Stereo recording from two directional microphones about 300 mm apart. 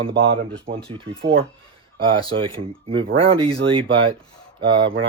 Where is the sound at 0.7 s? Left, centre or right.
Right.